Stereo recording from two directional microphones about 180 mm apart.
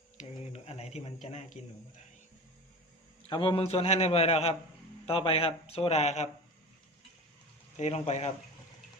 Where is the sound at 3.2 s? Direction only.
30° left (ahead or behind).